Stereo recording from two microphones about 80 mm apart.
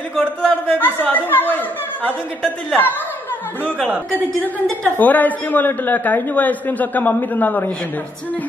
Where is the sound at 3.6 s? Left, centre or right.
Centre.